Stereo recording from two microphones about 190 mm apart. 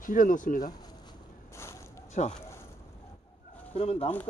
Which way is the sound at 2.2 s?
40° left (ahead or behind).